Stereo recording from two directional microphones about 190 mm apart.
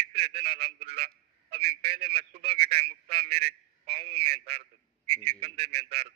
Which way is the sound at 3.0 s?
30° right (ahead or behind).